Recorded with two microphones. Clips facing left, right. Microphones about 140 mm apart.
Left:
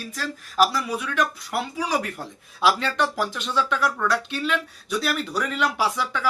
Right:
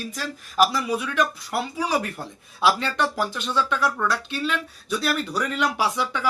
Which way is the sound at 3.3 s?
10° right (ahead or behind).